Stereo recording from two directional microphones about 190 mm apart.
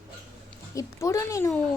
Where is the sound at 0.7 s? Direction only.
15° left (ahead or behind).